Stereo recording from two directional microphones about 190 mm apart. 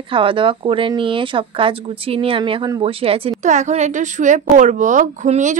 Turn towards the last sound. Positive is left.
turn(degrees=-40)  # may be behind; listen again after turning